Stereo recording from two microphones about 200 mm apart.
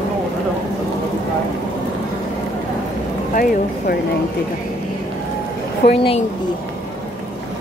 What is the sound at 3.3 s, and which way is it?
Speech, 50° left (ahead or behind).